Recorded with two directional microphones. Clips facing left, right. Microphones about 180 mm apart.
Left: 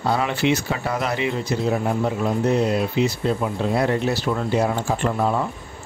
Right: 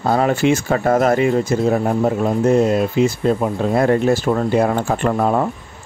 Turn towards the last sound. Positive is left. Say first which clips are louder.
# right 5 dB
turn(degrees=-55)  # may be behind; listen again after turning